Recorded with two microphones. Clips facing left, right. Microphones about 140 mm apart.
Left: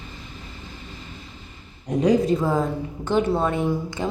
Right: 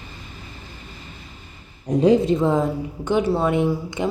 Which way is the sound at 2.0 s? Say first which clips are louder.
Right 2 dB; 25° right (ahead or behind).